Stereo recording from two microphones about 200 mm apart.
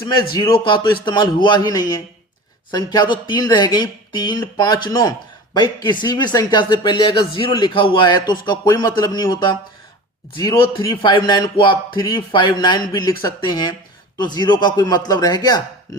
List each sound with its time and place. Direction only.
0.3 s speech: 25° left (ahead or behind)